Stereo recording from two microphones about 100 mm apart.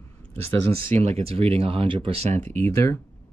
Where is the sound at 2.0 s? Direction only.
90° right.